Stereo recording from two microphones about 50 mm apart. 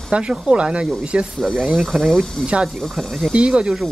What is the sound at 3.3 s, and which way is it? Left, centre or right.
Speech, centre.